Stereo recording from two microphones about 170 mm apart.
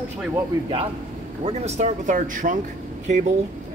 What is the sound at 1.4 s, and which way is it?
Speech, 40° right (ahead or behind).